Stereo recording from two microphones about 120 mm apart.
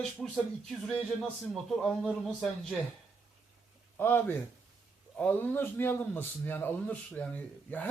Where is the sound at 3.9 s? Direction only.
15° left (ahead or behind).